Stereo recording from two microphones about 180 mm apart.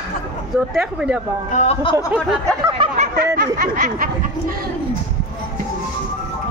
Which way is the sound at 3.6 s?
50° right (ahead or behind).